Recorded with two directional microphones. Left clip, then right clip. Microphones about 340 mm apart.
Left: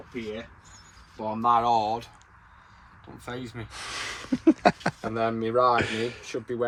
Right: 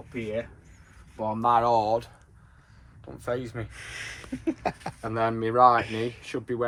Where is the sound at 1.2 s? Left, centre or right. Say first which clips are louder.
Even; centre.